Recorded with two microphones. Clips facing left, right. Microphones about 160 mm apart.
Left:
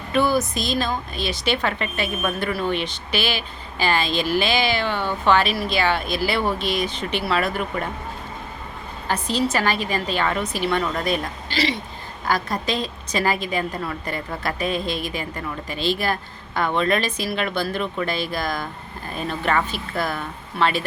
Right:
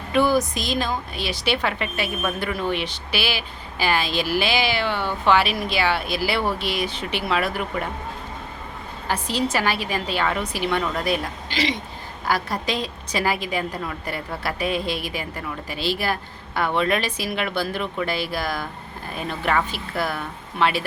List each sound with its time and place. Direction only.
0.1 s a woman's voice: 15° right (ahead or behind)
9.0 s a woman's voice: 10° right (ahead or behind)